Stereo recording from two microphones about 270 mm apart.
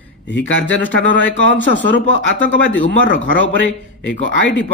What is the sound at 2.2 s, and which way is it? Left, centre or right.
Speech, left.